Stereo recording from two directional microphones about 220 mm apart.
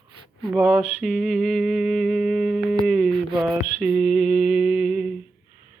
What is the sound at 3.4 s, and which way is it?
Mantra, 5° right (ahead or behind).